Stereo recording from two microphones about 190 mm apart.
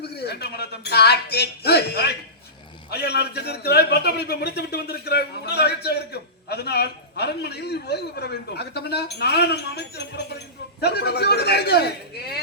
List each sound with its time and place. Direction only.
0.0 s a man's voice: 60° left (ahead or behind)